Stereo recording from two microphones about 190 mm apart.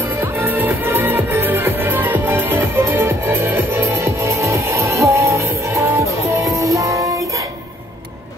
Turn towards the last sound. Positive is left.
turn(degrees=-15)  # may be behind; listen again after turning